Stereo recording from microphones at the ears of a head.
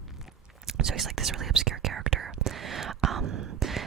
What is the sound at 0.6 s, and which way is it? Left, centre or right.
Whispering, right.